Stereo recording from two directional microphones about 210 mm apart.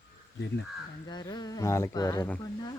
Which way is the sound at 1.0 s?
20° left (ahead or behind).